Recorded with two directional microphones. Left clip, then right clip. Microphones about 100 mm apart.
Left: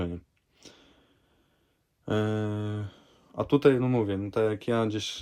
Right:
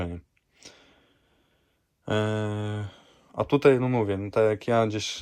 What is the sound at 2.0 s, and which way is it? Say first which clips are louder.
Speech: right 2 dB; 25° left (ahead or behind).